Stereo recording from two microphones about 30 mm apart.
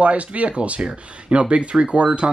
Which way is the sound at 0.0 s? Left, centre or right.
Right.